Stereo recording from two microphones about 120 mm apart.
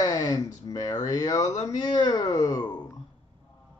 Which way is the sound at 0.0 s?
30° left (ahead or behind).